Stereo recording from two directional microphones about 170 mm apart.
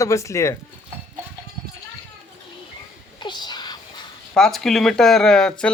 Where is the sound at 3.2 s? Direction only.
25° left (ahead or behind).